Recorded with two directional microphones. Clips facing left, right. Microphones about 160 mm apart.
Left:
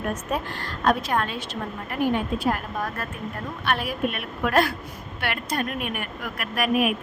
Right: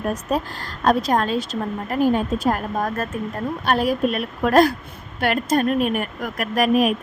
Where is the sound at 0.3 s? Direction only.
35° right (ahead or behind).